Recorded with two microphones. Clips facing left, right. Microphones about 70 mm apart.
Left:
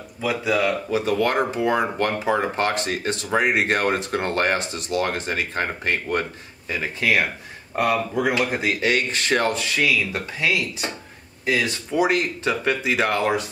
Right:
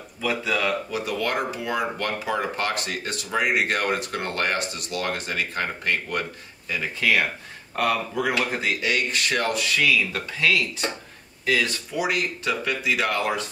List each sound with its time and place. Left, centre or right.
0.2 s speech: centre
0.9 s speech: left
8.8 s speech: left